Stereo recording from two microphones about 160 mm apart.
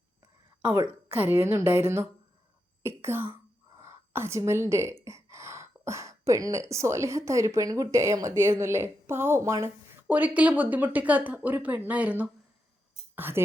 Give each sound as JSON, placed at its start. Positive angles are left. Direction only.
{"t": 0.6, "sound": "a woman's voice", "side_deg": -15}